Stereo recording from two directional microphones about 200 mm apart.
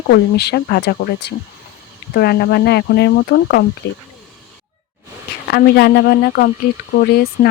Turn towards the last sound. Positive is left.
turn(degrees=40)  # may be behind; listen again after turning